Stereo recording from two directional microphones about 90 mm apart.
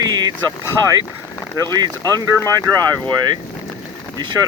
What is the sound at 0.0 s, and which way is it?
Boat, 45° right (ahead or behind).